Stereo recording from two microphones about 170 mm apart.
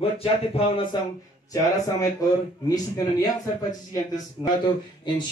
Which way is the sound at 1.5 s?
20° left (ahead or behind).